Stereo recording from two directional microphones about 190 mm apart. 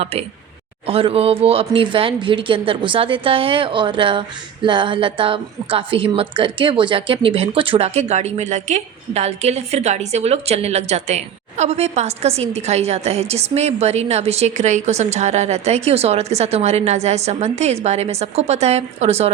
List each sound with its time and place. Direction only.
0.0 s speech: 30° right (ahead or behind)